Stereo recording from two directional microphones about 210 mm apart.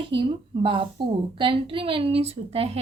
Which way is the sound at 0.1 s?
25° right (ahead or behind).